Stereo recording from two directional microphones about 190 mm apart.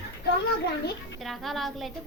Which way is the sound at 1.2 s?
Centre (ahead or behind).